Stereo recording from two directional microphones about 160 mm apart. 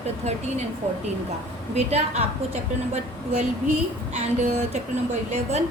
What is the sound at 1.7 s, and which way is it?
Speech, 40° right (ahead or behind).